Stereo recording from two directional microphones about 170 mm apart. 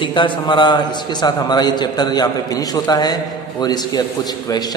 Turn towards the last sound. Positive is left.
turn(degrees=25)  # may be behind; listen again after turning